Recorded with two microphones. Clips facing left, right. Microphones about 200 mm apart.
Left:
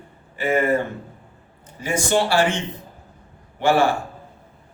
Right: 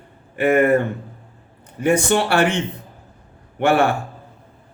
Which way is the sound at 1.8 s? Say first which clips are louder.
Right 4 dB; 60° right (ahead or behind).